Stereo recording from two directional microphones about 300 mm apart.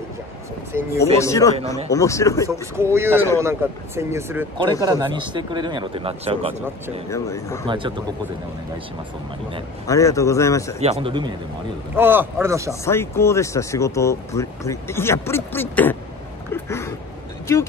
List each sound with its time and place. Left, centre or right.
0.7 s speech: centre
1.1 s speech: centre
2.4 s speech: centre
7.1 s speech: centre
7.6 s speech: centre
9.8 s speech: centre
10.8 s speech: centre
12.8 s speech: centre
16.5 s a sound: centre